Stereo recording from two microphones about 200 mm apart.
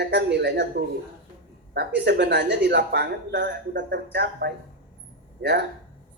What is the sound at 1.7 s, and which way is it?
Speech, 55° right (ahead or behind).